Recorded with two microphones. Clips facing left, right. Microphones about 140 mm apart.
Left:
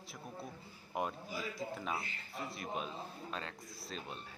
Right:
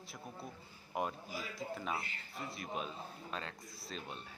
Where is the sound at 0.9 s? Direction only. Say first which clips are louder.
Even; centre (ahead or behind).